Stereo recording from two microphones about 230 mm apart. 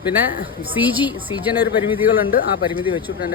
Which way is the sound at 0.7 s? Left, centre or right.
Centre.